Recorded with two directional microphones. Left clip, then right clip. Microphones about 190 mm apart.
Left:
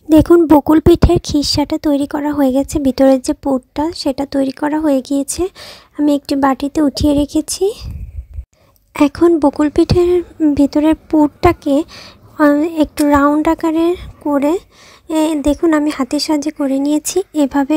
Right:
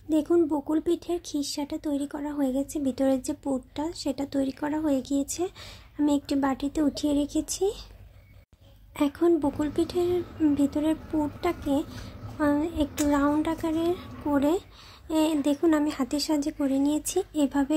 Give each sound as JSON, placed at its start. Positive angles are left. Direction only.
{"t": 0.1, "sound": "speech", "side_deg": 45}
{"t": 8.9, "sound": "speech", "side_deg": 40}